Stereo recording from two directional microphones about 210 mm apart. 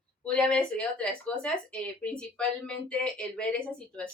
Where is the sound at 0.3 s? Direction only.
5° left (ahead or behind).